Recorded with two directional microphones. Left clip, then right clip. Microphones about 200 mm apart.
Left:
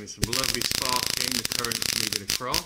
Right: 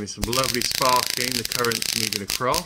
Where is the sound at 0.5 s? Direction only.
10° left (ahead or behind).